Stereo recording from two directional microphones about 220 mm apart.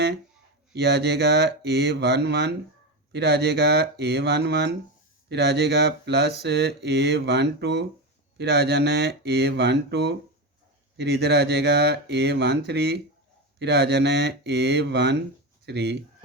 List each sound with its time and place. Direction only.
0.7 s mantra: 50° right (ahead or behind)